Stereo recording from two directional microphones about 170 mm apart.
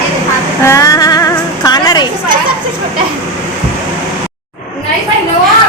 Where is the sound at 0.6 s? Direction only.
20° left (ahead or behind).